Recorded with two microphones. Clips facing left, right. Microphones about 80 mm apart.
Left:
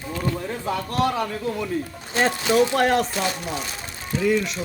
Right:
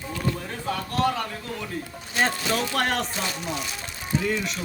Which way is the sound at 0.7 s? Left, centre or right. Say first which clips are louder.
Left 1 dB; centre.